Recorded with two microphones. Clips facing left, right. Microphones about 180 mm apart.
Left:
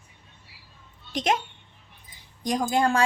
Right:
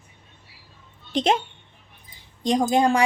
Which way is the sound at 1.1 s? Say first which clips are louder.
Right 4 dB; 30° right (ahead or behind).